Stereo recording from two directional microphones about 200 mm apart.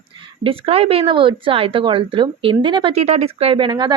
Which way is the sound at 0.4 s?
30° right (ahead or behind).